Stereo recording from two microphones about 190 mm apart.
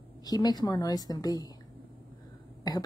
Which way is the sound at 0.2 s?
20° left (ahead or behind).